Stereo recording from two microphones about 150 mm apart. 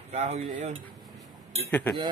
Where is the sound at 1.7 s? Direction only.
10° left (ahead or behind).